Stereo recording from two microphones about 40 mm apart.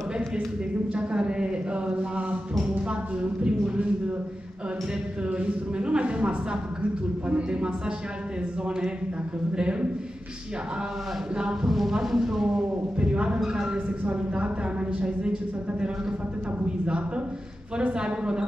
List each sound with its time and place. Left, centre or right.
0.9 s a sound: right
5.4 s speech: right
9.6 s speech: right
11.6 s speech: centre
13.0 s speech: right
13.8 s a woman's voice: right
16.6 s speech: right